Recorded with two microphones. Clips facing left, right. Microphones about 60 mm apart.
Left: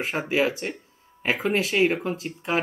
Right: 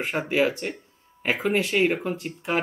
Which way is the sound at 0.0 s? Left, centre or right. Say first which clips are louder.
Right 1 dB; centre.